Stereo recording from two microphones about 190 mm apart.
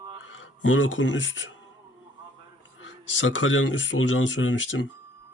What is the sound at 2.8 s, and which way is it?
Speech, 80° left.